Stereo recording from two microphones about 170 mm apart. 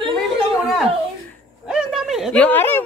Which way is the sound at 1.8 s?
Centre (ahead or behind).